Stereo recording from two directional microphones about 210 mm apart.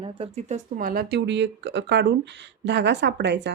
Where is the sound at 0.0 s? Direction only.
30° right (ahead or behind).